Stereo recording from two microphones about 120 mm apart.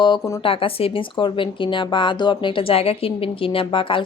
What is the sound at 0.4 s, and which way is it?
Speech, 50° left (ahead or behind).